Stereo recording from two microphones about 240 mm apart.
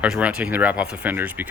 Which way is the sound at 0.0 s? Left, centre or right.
Centre.